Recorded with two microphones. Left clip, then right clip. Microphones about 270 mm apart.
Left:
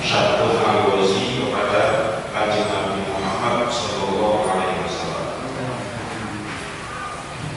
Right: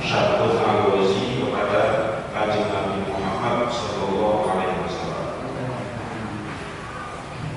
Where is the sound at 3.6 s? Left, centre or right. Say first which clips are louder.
Left 2 dB; right.